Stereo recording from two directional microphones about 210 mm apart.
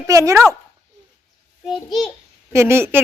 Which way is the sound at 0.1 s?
15° right (ahead or behind).